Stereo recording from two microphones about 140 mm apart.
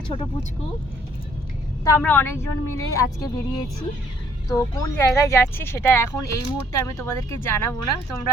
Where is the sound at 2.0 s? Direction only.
15° left (ahead or behind).